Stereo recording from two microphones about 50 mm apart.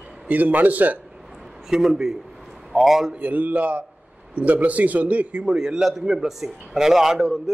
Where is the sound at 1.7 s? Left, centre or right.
Centre.